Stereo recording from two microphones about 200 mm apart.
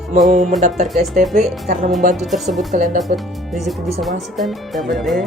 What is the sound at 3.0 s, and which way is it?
Speech, centre (ahead or behind).